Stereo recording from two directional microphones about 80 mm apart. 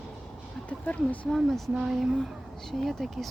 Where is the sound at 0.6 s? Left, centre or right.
Centre.